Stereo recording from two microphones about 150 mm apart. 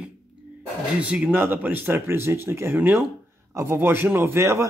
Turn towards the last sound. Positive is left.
turn(degrees=-20)  # may be behind; listen again after turning